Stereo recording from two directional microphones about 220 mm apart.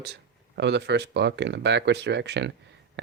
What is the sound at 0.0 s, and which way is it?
Speech, 50° right (ahead or behind).